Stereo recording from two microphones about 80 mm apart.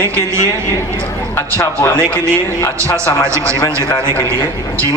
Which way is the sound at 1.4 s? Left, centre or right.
Left.